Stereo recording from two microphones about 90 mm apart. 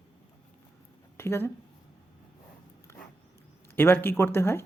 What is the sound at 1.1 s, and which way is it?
Speech, 25° left (ahead or behind).